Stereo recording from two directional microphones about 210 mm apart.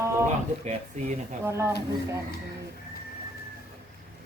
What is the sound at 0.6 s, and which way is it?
Speech, 35° right (ahead or behind).